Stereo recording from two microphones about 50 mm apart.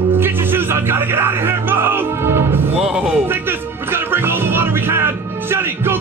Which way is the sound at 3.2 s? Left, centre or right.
Right.